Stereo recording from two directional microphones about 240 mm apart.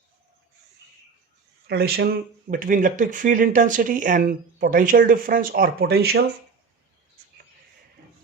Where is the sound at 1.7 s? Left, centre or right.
Right.